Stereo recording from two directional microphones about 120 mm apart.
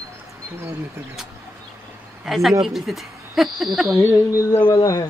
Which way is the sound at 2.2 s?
Centre (ahead or behind).